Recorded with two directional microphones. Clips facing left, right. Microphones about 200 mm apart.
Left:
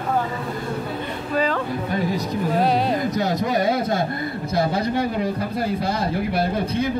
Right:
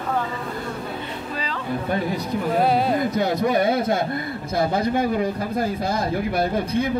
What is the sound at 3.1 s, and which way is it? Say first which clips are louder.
A man's voice: right 1 dB; 55° right (ahead or behind).